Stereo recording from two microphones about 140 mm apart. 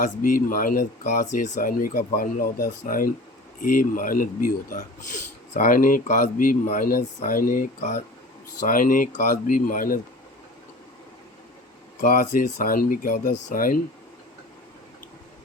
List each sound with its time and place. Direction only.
0.0 s speech: 80° left
1.4 s speech: 60° left (ahead or behind)
8.6 s speech: 80° left
11.9 s speech: 70° left (ahead or behind); by 13.7 s 85° left